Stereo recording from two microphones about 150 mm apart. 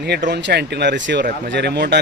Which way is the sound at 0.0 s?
90° right.